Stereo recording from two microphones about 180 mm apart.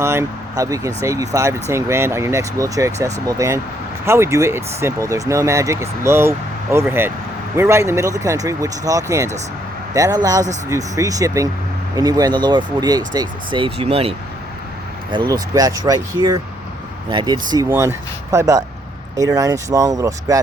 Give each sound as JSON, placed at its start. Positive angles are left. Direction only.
{"t": 0.0, "sound": "speech", "side_deg": -15}